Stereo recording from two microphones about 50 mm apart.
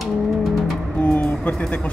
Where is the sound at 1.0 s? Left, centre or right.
Left.